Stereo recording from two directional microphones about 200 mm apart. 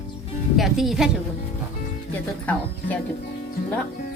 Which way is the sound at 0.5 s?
Centre (ahead or behind).